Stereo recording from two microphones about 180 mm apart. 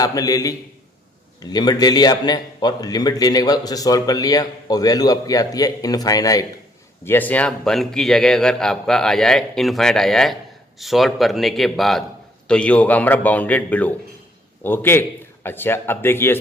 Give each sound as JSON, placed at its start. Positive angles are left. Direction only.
{"t": 0.0, "sound": "a man's voice", "side_deg": 20}